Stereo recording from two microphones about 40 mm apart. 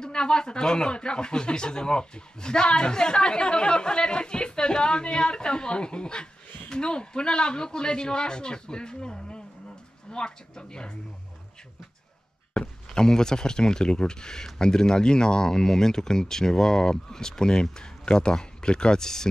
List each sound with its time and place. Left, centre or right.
0.0 s speech: left
12.9 s speech: centre